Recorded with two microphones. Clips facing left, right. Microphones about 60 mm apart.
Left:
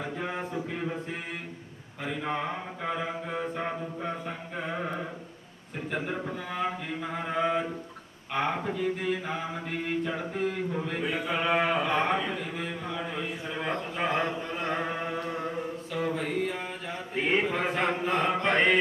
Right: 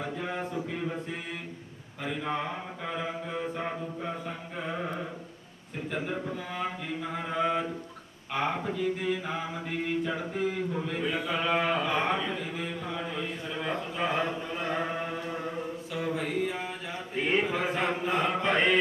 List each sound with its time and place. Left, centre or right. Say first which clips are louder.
0.0 s a sound: even; centre
2.0 s speech: left 1 dB; centre
3.4 s music: left 1 dB; centre
5.9 s speech: left 1 dB; centre
8.3 s mantra: left 1 dB; centre
10.2 s speech: even; centre
14.2 s chant: left 1 dB; centre
16.1 s a sound: even; centre
17.2 s mantra: left 1 dB; centre